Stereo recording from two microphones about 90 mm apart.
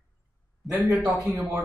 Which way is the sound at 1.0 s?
15° right (ahead or behind).